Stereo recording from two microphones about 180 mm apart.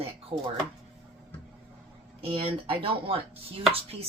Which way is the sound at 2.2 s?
30° right (ahead or behind).